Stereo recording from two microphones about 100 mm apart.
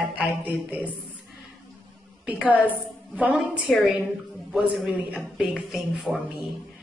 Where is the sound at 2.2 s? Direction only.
10° right (ahead or behind).